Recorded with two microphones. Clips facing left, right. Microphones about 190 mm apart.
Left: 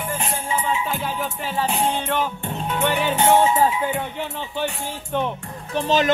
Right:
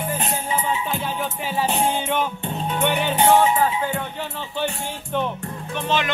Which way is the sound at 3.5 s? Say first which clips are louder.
Left 2 dB; 25° left (ahead or behind).